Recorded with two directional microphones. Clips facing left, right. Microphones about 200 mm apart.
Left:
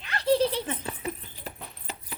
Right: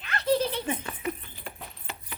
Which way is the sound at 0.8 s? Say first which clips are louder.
Right 1 dB; 35° left (ahead or behind).